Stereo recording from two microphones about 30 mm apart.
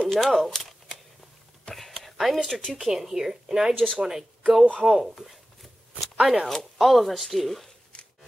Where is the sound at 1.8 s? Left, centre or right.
Centre.